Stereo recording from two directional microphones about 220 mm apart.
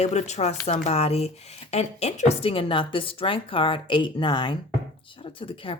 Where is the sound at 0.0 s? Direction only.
30° left (ahead or behind).